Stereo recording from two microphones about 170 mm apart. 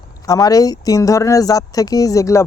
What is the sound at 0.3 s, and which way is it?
Speech, 20° left (ahead or behind).